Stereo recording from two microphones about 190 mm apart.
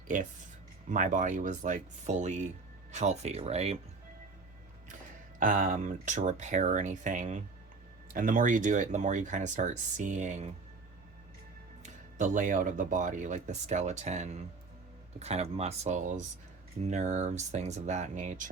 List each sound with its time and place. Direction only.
0.1 s speech: 40° right (ahead or behind)
5.4 s speech: 45° right (ahead or behind)
11.8 s speech: 40° right (ahead or behind)